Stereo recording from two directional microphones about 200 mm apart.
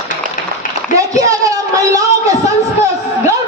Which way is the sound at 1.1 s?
15° right (ahead or behind).